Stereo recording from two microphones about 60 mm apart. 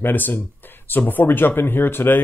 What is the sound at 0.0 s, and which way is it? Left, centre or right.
Speech, left.